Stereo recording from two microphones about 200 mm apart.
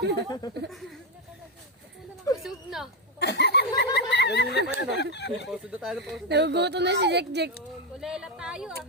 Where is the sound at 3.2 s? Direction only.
55° left (ahead or behind).